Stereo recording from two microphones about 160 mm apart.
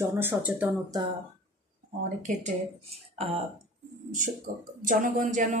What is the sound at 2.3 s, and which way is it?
A man's voice, 50° right (ahead or behind).